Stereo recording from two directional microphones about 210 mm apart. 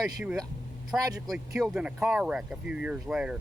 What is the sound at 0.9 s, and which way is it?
Speech, 15° right (ahead or behind).